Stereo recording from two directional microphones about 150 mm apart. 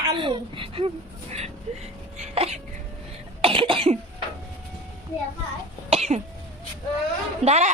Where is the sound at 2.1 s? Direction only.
45° right (ahead or behind).